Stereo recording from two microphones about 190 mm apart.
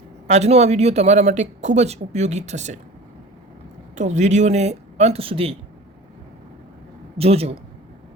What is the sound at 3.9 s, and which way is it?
Speech, 40° right (ahead or behind).